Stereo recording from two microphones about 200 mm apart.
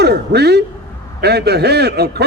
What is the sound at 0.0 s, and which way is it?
A man's voice, 55° right (ahead or behind).